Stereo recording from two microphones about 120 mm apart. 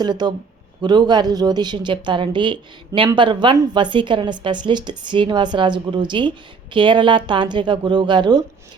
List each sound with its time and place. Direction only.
0.0 s a woman's voice: 35° right (ahead or behind)